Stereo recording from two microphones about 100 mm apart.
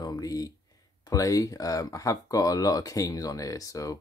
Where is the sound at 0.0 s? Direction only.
40° left (ahead or behind).